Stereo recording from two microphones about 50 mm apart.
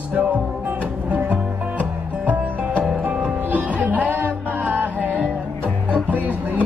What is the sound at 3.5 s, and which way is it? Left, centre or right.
Music, right.